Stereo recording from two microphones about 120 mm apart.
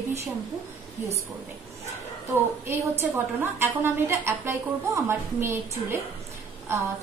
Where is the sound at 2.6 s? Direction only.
20° right (ahead or behind).